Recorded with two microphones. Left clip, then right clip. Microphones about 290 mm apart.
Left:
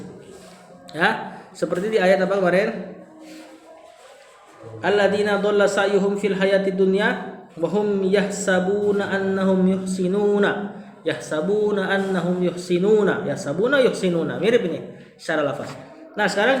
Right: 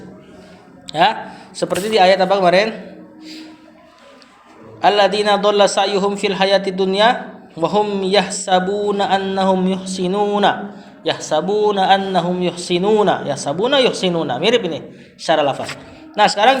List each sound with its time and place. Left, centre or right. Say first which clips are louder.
0.9 s a man's voice: right 6 dB; right
4.8 s a man's voice: right 5 dB; right